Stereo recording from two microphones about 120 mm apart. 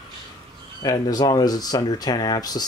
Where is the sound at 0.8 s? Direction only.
30° left (ahead or behind).